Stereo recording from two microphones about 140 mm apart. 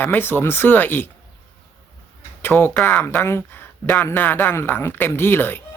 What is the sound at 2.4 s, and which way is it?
Speech, 15° left (ahead or behind).